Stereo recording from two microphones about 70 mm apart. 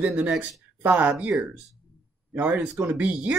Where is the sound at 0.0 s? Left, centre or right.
Centre.